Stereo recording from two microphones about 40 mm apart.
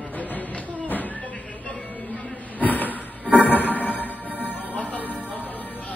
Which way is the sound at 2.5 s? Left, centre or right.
Left.